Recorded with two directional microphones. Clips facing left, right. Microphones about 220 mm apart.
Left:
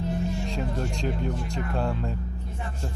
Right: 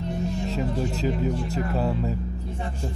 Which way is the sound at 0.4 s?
5° right (ahead or behind).